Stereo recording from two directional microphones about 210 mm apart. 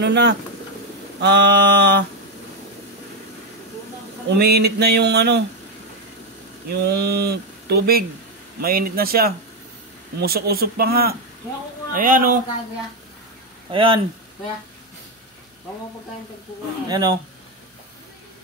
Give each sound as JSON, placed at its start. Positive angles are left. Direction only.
{"t": 0.0, "sound": "speech", "side_deg": -55}
{"t": 4.4, "sound": "speech", "side_deg": -50}
{"t": 6.7, "sound": "speech", "side_deg": -50}
{"t": 13.7, "sound": "speech", "side_deg": -25}
{"t": 16.8, "sound": "speech", "side_deg": -20}